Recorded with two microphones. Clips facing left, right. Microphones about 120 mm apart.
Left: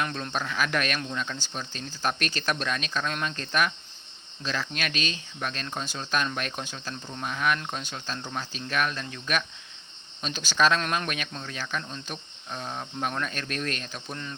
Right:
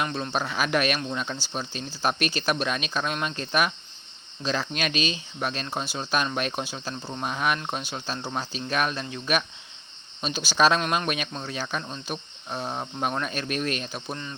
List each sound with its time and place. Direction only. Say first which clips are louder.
0.0 s speech: right 3 dB; 10° right (ahead or behind)
4.7 s speech: right 4 dB; 20° right (ahead or behind)